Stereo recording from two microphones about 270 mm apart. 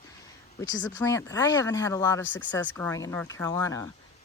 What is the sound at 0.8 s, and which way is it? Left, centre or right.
Speech, centre.